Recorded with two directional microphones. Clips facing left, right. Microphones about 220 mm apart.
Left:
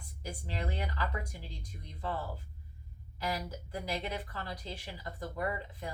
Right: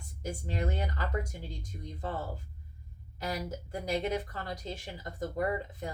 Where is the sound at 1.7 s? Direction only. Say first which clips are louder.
Right 8 dB; 35° right (ahead or behind).